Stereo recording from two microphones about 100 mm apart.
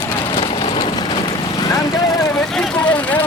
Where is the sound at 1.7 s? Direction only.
40° left (ahead or behind).